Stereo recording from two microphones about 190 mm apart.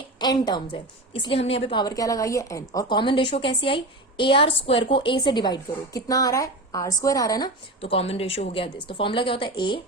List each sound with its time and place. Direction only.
0.2 s a woman's voice: 20° left (ahead or behind)